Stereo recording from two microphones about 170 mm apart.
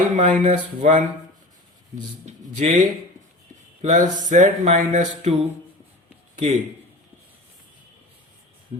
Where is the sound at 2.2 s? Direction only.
45° right (ahead or behind).